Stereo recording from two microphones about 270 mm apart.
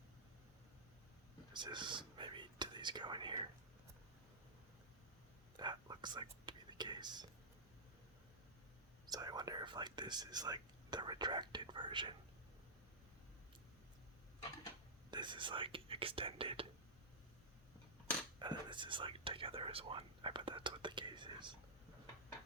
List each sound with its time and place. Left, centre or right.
1.5 s speech: centre
5.5 s whispering: centre
9.0 s speech: centre
15.1 s speech: centre
18.3 s speech: centre